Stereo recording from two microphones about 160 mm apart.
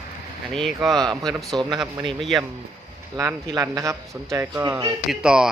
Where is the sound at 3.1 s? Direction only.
25° right (ahead or behind).